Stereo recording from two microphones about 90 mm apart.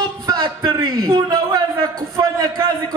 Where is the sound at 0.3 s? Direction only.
50° right (ahead or behind).